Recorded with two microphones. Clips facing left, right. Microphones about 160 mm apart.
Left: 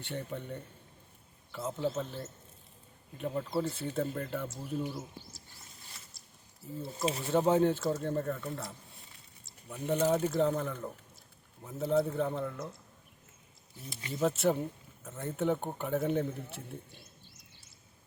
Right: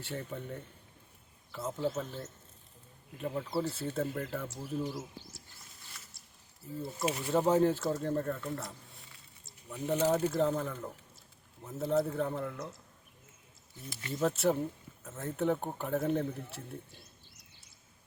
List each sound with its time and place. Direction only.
0.0 s speech: centre (ahead or behind)
7.0 s speech: 25° left (ahead or behind)
7.3 s speech: centre (ahead or behind)
9.6 s speech: centre (ahead or behind)
14.1 s speech: centre (ahead or behind)